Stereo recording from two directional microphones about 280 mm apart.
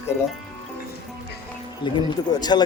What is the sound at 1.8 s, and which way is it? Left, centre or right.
Speech, centre.